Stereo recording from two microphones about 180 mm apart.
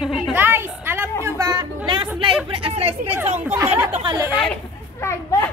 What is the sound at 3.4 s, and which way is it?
Speech, 15° right (ahead or behind).